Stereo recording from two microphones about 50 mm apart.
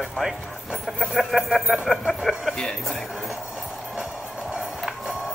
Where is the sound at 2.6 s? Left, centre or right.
Centre.